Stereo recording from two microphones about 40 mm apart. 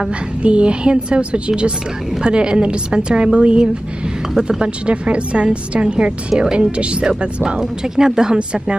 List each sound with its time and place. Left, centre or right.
0.4 s a woman's voice: right
7.5 s speech: centre